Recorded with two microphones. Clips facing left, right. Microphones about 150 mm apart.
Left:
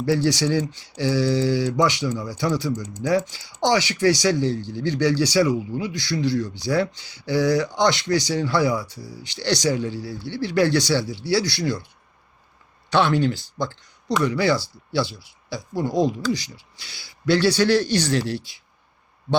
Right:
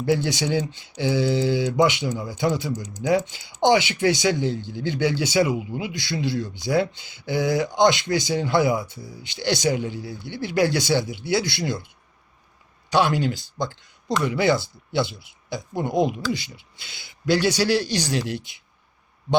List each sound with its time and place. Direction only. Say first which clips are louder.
0.0 s speech: left 2 dB; 20° right (ahead or behind)
12.9 s speech: left 1 dB; 10° right (ahead or behind)